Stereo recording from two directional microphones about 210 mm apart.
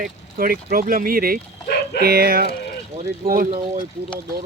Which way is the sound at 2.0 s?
45° right (ahead or behind).